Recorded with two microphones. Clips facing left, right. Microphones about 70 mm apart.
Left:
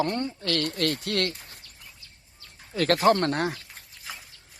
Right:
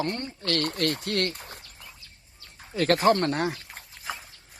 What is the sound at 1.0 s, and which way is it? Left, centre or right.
Speech, left.